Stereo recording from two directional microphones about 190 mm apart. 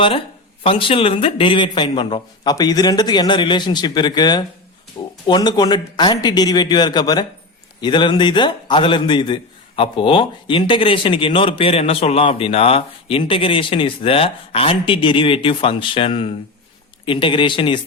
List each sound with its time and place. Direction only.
0.6 s a man's voice: 25° left (ahead or behind)